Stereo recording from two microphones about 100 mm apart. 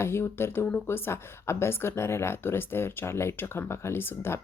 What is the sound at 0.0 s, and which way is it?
A woman's voice, 25° left (ahead or behind).